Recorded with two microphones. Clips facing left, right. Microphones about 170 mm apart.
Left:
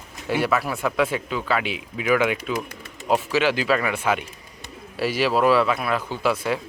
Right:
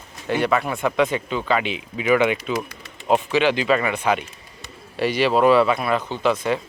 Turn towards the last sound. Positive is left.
turn(degrees=5)  # may be behind; listen again after turning